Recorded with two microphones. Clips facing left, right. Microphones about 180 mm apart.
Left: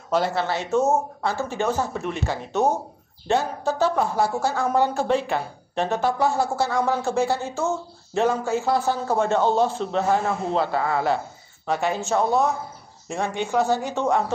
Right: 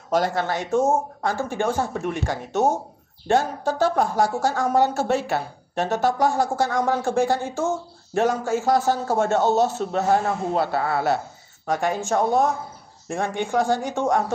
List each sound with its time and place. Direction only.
0.1 s speech: 45° right (ahead or behind)